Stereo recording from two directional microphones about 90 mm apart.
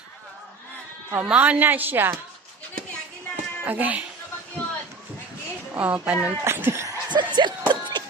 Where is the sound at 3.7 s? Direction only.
20° right (ahead or behind).